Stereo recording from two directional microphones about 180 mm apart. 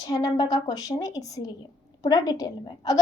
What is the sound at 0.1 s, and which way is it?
A woman's voice, 20° left (ahead or behind).